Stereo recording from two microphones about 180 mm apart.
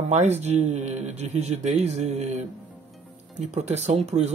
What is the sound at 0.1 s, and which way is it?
Speech, 40° right (ahead or behind).